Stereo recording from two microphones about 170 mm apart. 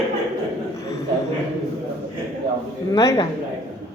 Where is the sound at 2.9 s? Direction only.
20° left (ahead or behind).